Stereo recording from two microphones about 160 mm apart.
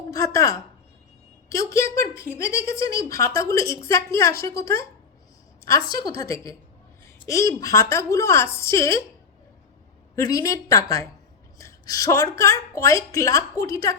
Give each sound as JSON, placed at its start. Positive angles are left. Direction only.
{"t": 0.1, "sound": "a woman's voice", "side_deg": 20}
{"t": 10.2, "sound": "a woman's voice", "side_deg": 20}